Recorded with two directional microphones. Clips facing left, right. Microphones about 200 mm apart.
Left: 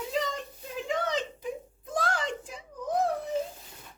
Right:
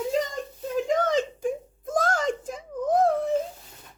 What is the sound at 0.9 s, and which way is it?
Whimper, 45° right (ahead or behind).